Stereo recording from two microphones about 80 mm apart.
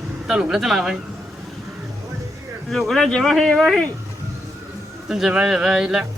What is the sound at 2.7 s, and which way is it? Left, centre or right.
Speech, centre.